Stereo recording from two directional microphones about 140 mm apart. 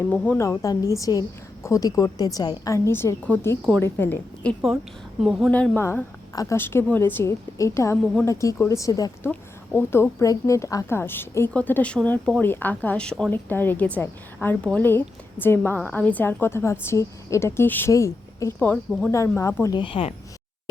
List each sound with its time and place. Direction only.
0.1 s a woman's voice: 5° left (ahead or behind)
0.3 s a woman's voice: 20° left (ahead or behind)
5.2 s speech: 5° right (ahead or behind)
5.5 s a woman's voice: 10° left (ahead or behind)
18.9 s speech: 5° left (ahead or behind)
19.4 s a woman's voice: 20° left (ahead or behind)
19.7 s speech: 40° left (ahead or behind)